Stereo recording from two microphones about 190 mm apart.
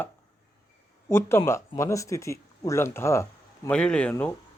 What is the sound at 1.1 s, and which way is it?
Speech, 15° left (ahead or behind).